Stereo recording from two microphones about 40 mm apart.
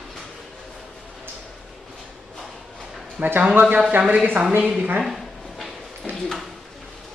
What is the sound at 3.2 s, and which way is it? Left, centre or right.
Speech, right.